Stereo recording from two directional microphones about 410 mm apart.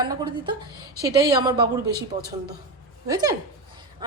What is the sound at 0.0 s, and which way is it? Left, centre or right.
A woman's voice, centre.